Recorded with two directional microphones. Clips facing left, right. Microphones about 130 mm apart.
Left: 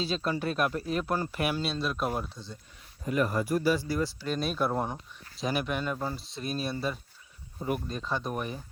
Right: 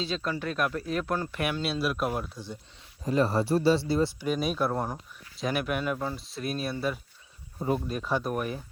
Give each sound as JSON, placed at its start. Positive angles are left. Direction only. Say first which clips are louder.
{"t": 0.2, "sound": "speech", "louder": "left 1 dB", "side_deg": 15}
{"t": 0.4, "sound": "speech", "louder": "left 1 dB", "side_deg": 30}
{"t": 0.9, "sound": "speech", "louder": "even", "side_deg": 0}
{"t": 3.1, "sound": "speech", "louder": "right 3 dB", "side_deg": -30}
{"t": 4.2, "sound": "speech", "louder": "right 2 dB", "side_deg": -10}